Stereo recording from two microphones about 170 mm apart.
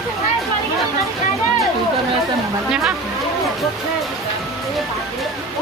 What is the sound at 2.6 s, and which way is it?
Speech, 5° right (ahead or behind).